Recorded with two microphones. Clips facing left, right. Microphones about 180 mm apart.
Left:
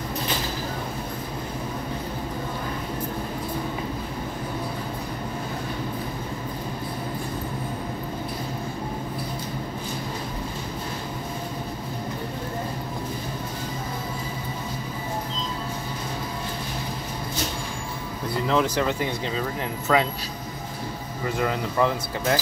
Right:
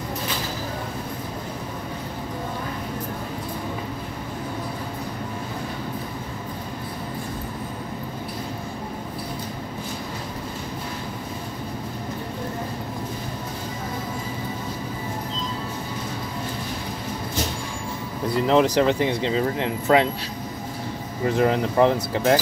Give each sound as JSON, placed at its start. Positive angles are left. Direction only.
{"t": 18.5, "sound": "speech", "side_deg": -25}
{"t": 21.4, "sound": "speech", "side_deg": -30}